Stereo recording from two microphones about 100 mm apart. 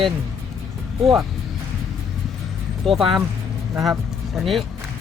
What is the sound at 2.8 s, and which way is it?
Speech, centre (ahead or behind).